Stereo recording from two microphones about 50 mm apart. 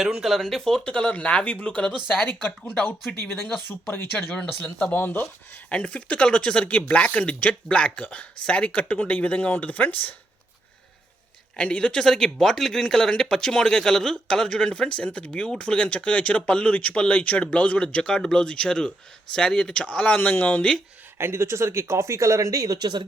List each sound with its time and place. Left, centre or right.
0.0 s speech: centre
0.4 s speech: centre
0.9 s speech: centre
3.7 s speech: left
4.6 s speech: left
4.9 s speech: left
5.6 s speech: left
11.5 s speech: left
12.0 s speech: centre; by 20.7 s left
21.2 s speech: right